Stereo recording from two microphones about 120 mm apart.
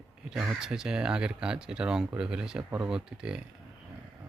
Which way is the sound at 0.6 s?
5° right (ahead or behind).